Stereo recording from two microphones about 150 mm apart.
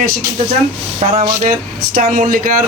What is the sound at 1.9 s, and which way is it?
Speech, 60° right (ahead or behind).